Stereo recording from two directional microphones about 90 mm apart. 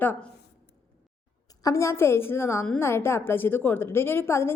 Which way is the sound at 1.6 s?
35° left (ahead or behind).